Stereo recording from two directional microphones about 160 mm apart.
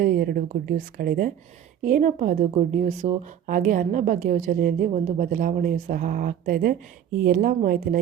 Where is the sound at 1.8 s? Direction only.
55° right (ahead or behind).